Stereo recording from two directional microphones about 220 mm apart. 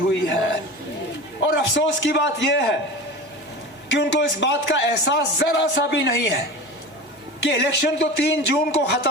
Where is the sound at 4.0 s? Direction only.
50° left (ahead or behind).